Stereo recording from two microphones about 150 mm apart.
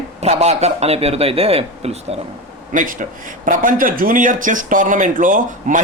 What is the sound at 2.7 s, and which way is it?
A man's voice, 60° right (ahead or behind).